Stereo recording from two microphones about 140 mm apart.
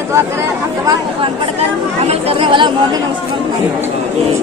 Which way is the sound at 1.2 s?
45° right (ahead or behind).